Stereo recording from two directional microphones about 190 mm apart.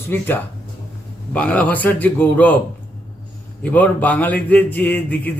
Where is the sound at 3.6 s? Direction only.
10° left (ahead or behind).